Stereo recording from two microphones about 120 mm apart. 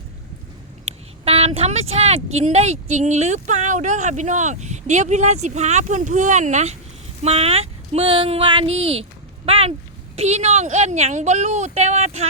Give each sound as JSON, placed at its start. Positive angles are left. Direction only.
{"t": 1.2, "sound": "speech", "side_deg": -55}
{"t": 7.2, "sound": "speech", "side_deg": -60}
{"t": 10.2, "sound": "speech", "side_deg": -65}